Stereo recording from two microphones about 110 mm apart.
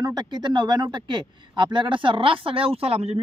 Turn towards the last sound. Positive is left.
turn(degrees=-65)  # may be behind; listen again after turning